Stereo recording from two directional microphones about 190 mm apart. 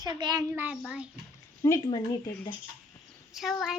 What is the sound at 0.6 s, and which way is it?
Speech, 5° right (ahead or behind).